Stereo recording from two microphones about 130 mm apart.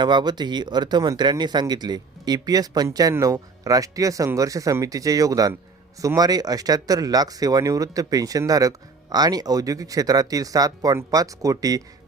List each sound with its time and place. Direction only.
0.0 s speech: 35° right (ahead or behind)